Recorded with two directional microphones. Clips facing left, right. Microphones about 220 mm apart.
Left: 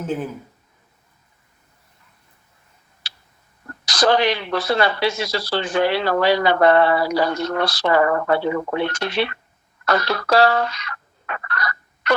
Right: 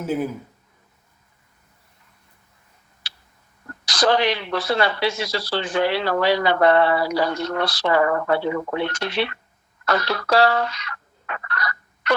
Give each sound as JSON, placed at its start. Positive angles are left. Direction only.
{"t": 0.0, "sound": "speech", "side_deg": -10}
{"t": 3.0, "sound": "a sound", "side_deg": 45}
{"t": 3.8, "sound": "speech", "side_deg": 45}
{"t": 9.8, "sound": "fowl", "side_deg": 45}